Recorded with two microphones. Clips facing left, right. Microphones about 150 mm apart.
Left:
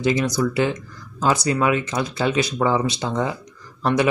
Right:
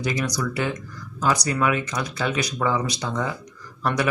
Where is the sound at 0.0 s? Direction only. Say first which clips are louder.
Left 6 dB; 25° left (ahead or behind).